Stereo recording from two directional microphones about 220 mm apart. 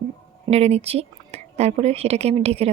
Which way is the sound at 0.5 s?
30° right (ahead or behind).